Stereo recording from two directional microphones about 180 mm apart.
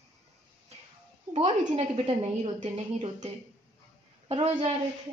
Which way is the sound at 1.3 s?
35° right (ahead or behind).